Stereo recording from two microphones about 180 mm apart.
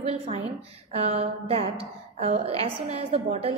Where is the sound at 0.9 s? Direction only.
35° right (ahead or behind).